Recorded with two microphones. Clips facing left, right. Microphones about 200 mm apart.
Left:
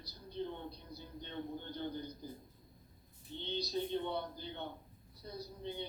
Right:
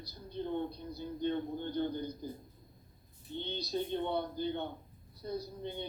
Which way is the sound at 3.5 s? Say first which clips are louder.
Right 1 dB; 55° right (ahead or behind).